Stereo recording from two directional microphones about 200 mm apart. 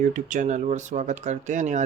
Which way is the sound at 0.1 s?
40° right (ahead or behind).